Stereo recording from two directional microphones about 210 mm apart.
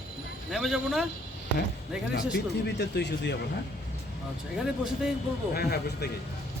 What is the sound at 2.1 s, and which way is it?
Speech, 55° left (ahead or behind).